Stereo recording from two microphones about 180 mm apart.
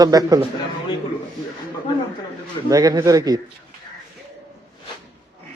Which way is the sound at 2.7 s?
20° right (ahead or behind).